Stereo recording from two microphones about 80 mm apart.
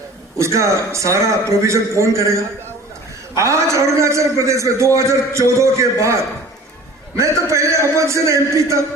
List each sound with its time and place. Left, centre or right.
0.3 s a man's voice: right
3.3 s a man's voice: right